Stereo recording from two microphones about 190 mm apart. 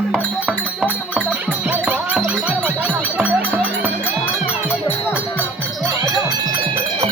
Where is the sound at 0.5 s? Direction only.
10° left (ahead or behind).